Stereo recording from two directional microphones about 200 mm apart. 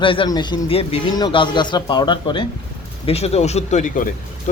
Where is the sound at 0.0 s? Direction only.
25° left (ahead or behind).